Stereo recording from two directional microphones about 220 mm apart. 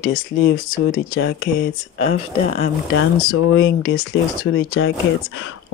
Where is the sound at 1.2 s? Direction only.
55° left (ahead or behind).